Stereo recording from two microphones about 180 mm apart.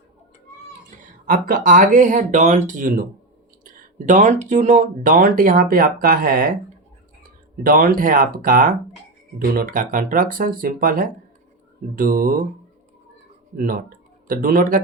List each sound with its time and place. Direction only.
1.3 s speech: 50° right (ahead or behind)
7.6 s speech: 55° right (ahead or behind)
13.6 s speech: 55° right (ahead or behind)